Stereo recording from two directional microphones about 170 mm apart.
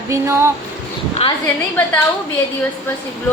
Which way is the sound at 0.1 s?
15° right (ahead or behind).